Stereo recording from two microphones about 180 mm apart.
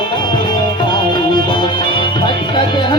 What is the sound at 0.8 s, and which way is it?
Music, 25° left (ahead or behind).